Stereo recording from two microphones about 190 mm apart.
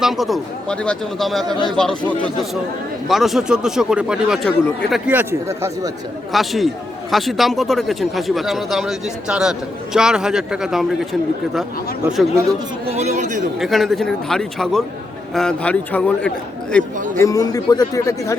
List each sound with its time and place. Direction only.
0.0 s speech: centre (ahead or behind)
6.3 s speech: centre (ahead or behind)
12.9 s speech: 35° right (ahead or behind)
13.6 s a man's voice: centre (ahead or behind)
17.2 s a man's voice: 15° left (ahead or behind)